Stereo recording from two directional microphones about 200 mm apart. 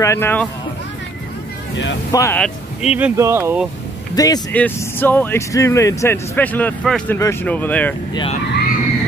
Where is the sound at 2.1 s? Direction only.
15° left (ahead or behind).